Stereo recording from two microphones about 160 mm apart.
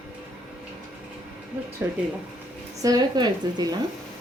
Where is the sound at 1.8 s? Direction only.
10° right (ahead or behind).